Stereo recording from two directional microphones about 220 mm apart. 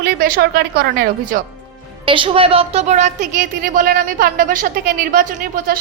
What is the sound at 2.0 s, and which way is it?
A woman's voice, 25° right (ahead or behind).